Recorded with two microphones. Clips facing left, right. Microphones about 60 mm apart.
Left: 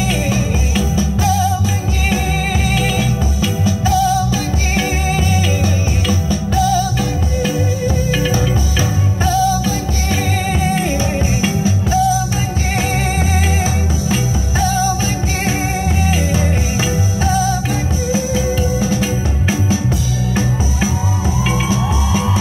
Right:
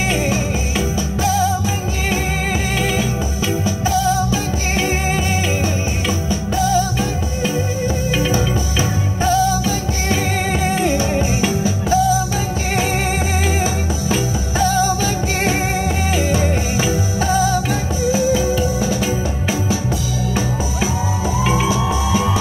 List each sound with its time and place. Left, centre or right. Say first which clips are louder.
0.0 s music: left 1 dB; right
3.6 s music: left 4 dB; right
9.2 s music: left 1 dB; right
11.1 s music: even; left
14.6 s music: right 1 dB; right
16.1 s music: even; right
18.1 s music: right 1 dB; left